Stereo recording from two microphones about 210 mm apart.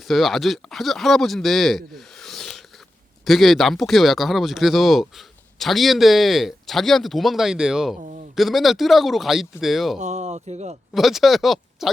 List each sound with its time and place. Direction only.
0.0 s speech: centre (ahead or behind)
10.0 s speech: 35° right (ahead or behind)
10.9 s speech: centre (ahead or behind)